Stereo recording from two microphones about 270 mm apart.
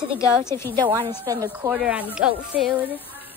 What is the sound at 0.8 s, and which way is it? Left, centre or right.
A woman's voice, centre.